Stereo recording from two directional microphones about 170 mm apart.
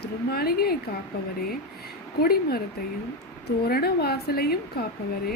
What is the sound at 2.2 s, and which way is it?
A woman's voice, 65° left (ahead or behind).